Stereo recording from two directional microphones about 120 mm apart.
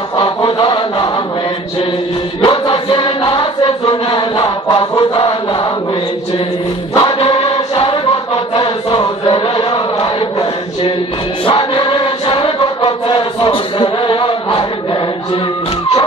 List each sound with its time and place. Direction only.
0.2 s chant: 40° left (ahead or behind)
2.4 s music: 40° left (ahead or behind)
6.9 s music: 35° left (ahead or behind)
7.2 s choir: 55° left (ahead or behind)
8.5 s chant: 45° left (ahead or behind)
11.4 s music: 45° left (ahead or behind)